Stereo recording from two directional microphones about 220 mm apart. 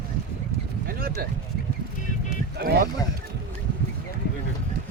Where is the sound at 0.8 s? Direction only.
45° right (ahead or behind).